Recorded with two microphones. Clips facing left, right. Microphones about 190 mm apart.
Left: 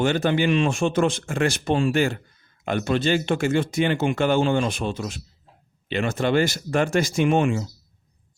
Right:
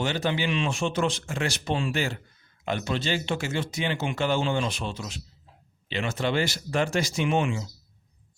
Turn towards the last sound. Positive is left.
turn(degrees=50)  # may be behind; listen again after turning